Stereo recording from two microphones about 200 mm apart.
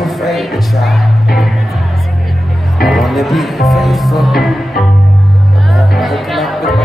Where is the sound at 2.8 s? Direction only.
Centre (ahead or behind).